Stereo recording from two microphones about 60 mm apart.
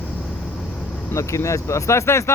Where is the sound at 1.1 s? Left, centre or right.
Left.